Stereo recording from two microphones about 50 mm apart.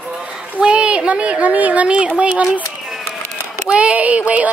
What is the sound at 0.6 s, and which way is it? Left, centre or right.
Speech, right.